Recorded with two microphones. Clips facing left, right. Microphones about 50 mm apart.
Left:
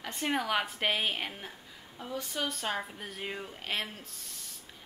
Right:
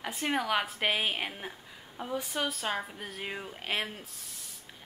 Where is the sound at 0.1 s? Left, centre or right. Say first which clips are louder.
Right 1 dB; centre.